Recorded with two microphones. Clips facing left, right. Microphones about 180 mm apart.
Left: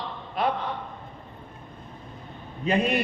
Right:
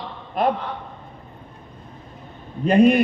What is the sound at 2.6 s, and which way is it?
Speech, 50° right (ahead or behind).